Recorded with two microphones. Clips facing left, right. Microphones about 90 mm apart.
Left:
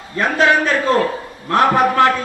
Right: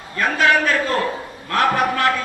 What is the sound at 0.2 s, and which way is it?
A man's voice, 25° left (ahead or behind).